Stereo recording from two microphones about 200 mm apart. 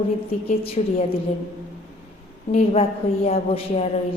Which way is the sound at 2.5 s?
30° left (ahead or behind).